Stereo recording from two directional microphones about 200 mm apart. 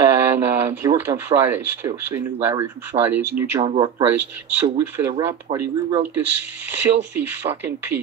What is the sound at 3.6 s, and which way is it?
Speech, 25° right (ahead or behind).